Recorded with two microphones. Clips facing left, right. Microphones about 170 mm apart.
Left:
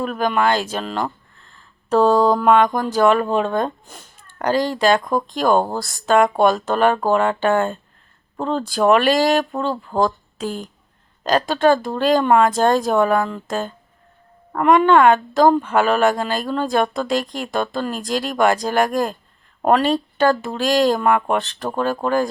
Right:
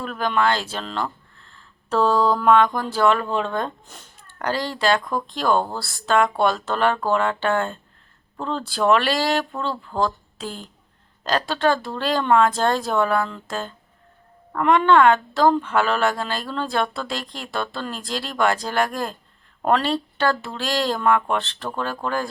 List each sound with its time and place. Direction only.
0.0 s speech: 15° left (ahead or behind)
1.5 s a sound: 15° left (ahead or behind)
2.7 s a child's voice: 15° left (ahead or behind)
4.9 s speech: 45° left (ahead or behind)
5.2 s speech: 15° left (ahead or behind)